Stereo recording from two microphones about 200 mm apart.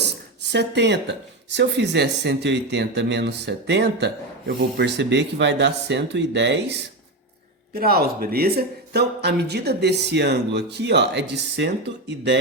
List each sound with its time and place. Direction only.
0.0 s a sound: 55° right (ahead or behind)
1.5 s speech: 60° right (ahead or behind)
7.8 s speech: 50° right (ahead or behind)